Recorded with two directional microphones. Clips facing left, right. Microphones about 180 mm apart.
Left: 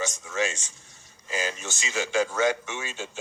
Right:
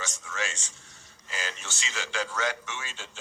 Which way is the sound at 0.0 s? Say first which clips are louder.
Left 7 dB; 20° left (ahead or behind).